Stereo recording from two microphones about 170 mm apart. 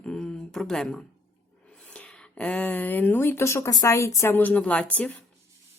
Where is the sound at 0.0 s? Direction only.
5° left (ahead or behind).